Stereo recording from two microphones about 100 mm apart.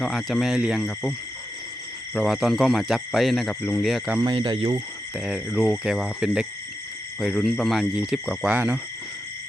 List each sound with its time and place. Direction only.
0.0 s speech: centre (ahead or behind)
2.1 s speech: centre (ahead or behind)
3.5 s speech: 15° left (ahead or behind)
3.8 s speech: centre (ahead or behind)
4.4 s speech: 60° right (ahead or behind)
5.2 s speech: 5° right (ahead or behind)
8.5 s speech: 15° right (ahead or behind)